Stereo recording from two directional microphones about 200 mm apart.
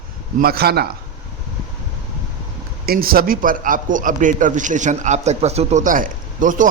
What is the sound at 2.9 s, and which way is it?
A man's voice, 50° right (ahead or behind).